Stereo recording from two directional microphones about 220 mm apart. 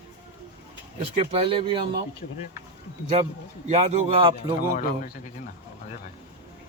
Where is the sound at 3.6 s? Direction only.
30° right (ahead or behind).